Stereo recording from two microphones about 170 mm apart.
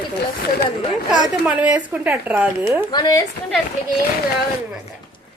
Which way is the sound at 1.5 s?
5° right (ahead or behind).